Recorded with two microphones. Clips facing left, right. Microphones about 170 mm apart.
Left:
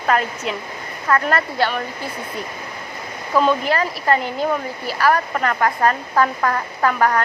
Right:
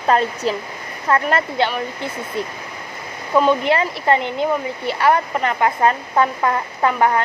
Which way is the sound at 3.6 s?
25° right (ahead or behind).